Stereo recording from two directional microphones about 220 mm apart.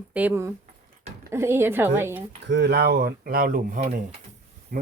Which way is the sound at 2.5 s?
50° right (ahead or behind).